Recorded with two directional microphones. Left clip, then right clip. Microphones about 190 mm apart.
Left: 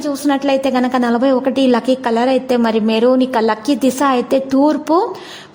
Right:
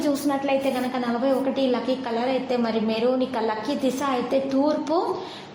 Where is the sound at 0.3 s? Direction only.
55° left (ahead or behind).